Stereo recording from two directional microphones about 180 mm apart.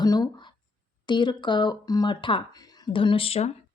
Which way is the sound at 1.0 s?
25° left (ahead or behind).